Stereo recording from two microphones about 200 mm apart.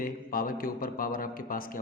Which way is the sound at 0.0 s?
45° left (ahead or behind).